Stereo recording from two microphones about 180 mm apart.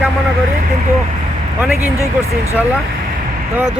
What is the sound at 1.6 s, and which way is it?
Speech, 10° right (ahead or behind).